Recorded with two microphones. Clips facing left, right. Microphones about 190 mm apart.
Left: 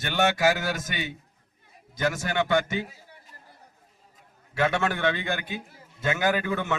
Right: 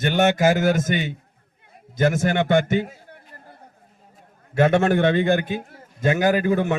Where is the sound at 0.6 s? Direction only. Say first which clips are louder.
Right 10 dB; 50° right (ahead or behind).